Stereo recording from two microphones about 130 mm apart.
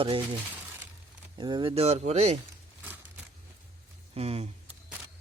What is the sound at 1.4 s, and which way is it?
Speech, 35° right (ahead or behind).